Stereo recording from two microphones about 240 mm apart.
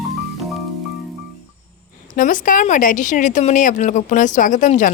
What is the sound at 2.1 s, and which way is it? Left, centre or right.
A woman's voice, left.